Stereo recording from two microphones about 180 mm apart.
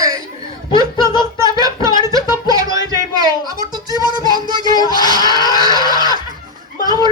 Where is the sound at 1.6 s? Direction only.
20° right (ahead or behind).